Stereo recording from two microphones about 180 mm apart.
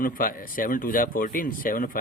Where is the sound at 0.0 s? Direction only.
50° left (ahead or behind).